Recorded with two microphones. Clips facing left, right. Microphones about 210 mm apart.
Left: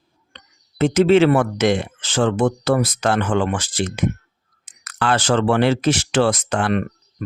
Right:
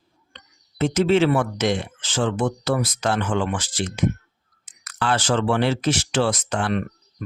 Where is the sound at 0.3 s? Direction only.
75° left (ahead or behind).